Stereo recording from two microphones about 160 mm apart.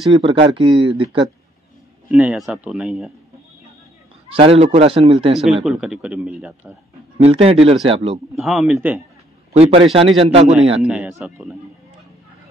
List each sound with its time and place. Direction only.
0.1 s speech: 30° right (ahead or behind)
2.0 s speech: 10° right (ahead or behind)
4.4 s speech: 35° right (ahead or behind)
5.6 s a man's voice: 5° right (ahead or behind)
7.2 s speech: 40° right (ahead or behind)
8.4 s a man's voice: centre (ahead or behind)
9.5 s speech: 40° right (ahead or behind)
10.8 s a man's voice: 5° right (ahead or behind)